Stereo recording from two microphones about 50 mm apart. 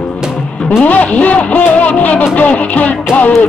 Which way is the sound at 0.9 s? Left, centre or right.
Left.